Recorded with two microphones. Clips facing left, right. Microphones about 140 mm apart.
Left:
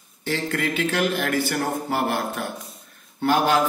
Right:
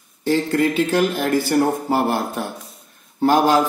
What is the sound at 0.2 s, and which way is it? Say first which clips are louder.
Speech: right 8 dB; 35° right (ahead or behind).